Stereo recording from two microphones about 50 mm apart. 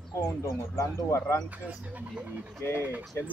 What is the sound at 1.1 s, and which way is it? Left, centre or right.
Speech, left.